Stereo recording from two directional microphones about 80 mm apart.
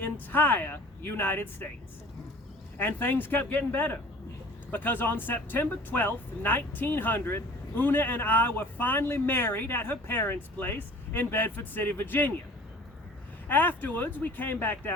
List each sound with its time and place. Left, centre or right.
0.0 s speech: left
2.7 s speech: left
13.5 s speech: left